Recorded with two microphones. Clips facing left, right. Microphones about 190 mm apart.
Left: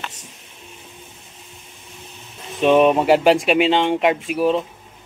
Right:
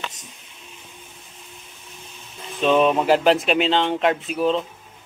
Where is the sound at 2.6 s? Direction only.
15° left (ahead or behind).